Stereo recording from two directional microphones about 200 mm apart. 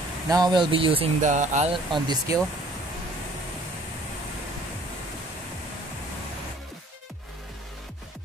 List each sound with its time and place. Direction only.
0.3 s speech: 20° right (ahead or behind)
1.2 s speech: 40° right (ahead or behind)
1.9 s speech: 20° right (ahead or behind)